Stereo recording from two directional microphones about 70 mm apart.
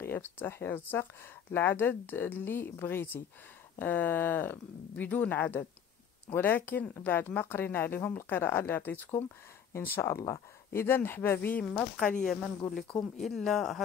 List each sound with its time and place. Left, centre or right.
0.0 s speech: left; by 12.3 s centre
12.3 s speech: centre